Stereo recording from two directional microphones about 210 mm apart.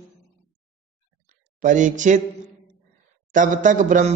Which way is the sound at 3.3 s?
40° right (ahead or behind).